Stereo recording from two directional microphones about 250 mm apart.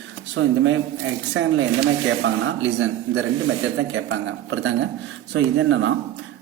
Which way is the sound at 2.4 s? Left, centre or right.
Right.